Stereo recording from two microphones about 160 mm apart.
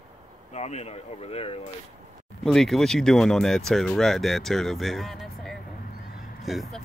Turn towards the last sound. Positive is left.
turn(degrees=0)  # may be behind; listen again after turning